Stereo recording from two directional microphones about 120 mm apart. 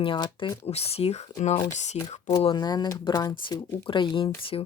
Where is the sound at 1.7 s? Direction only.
75° left (ahead or behind).